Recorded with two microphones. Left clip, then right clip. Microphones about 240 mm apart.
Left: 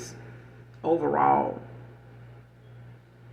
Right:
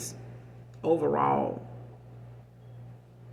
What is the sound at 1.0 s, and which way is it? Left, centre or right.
Speech, right.